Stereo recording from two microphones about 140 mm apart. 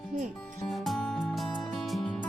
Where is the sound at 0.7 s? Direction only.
Centre (ahead or behind).